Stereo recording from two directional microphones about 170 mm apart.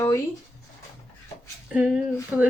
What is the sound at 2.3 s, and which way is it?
Speech, 10° right (ahead or behind).